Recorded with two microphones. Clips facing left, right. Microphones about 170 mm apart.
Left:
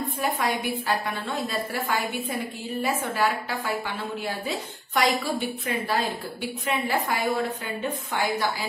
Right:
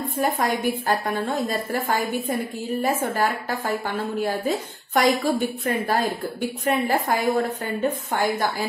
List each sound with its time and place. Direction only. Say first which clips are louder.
0.2 s a woman's voice: right 5 dB; 45° right (ahead or behind)